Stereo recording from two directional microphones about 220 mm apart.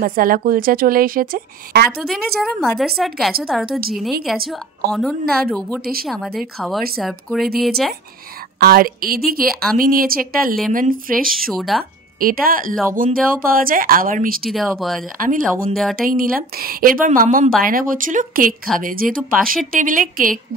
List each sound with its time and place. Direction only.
0.0 s speech: 40° right (ahead or behind)
2.0 s speech: centre (ahead or behind)
8.5 s speech: 45° right (ahead or behind)
11.3 s speech: centre (ahead or behind)
12.2 s speech: 40° right (ahead or behind)
14.4 s speech: centre (ahead or behind)
15.1 s speech: 40° right (ahead or behind)
15.7 s speech: centre (ahead or behind)
16.0 s speech: 40° right (ahead or behind)